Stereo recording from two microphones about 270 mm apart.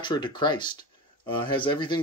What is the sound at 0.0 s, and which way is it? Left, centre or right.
Speech, centre.